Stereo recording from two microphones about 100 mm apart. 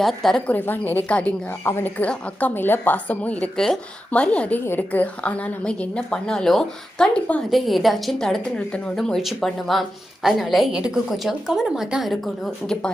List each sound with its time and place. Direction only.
0.0 s a woman's voice: centre (ahead or behind)
0.5 s a woman's voice: 20° left (ahead or behind); by 12.9 s 5° left (ahead or behind)